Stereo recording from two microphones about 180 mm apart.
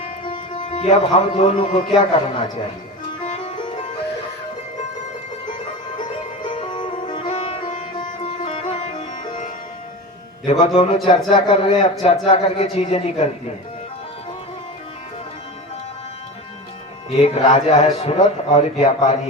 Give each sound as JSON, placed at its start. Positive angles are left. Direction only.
{"t": 0.5, "sound": "a man's voice", "side_deg": 40}
{"t": 3.2, "sound": "music", "side_deg": 35}
{"t": 6.0, "sound": "music", "side_deg": 25}
{"t": 7.3, "sound": "music", "side_deg": 35}
{"t": 10.4, "sound": "a man's voice", "side_deg": 35}
{"t": 17.1, "sound": "a man's voice", "side_deg": 35}